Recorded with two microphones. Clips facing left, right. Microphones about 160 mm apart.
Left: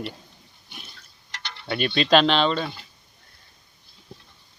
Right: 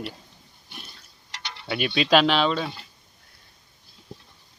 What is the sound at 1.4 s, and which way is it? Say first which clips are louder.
Speech: left 1 dB; 5° right (ahead or behind).